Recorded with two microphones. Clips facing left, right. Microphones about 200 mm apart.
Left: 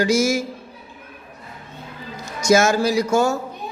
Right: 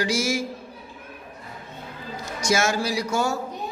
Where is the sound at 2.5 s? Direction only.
45° left (ahead or behind).